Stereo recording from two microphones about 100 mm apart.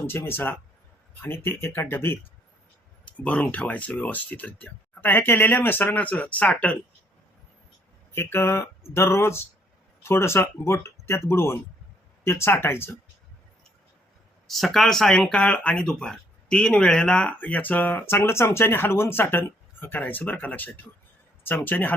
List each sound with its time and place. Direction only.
0.1 s speech: 20° left (ahead or behind)
3.1 s speech: 15° left (ahead or behind)
8.1 s speech: 25° left (ahead or behind)
14.4 s speech: centre (ahead or behind); by 21.9 s 20° left (ahead or behind)